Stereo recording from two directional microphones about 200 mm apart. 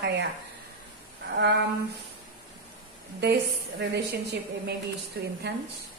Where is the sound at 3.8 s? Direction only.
55° right (ahead or behind).